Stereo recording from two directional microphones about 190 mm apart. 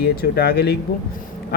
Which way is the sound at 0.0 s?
55° left (ahead or behind).